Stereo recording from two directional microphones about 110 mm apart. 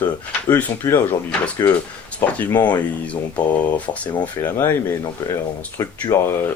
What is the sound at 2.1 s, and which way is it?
Speech, 15° left (ahead or behind).